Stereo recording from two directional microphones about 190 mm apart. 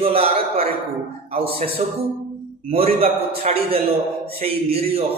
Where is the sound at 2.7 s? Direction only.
30° right (ahead or behind).